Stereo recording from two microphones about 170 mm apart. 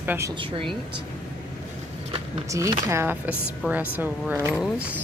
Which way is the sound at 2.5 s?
20° right (ahead or behind).